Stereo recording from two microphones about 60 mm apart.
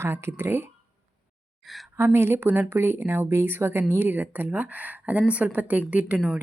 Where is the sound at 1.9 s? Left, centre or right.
Right.